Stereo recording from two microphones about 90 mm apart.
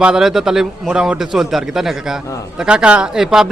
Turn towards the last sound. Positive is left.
turn(degrees=-5)  # may be behind; listen again after turning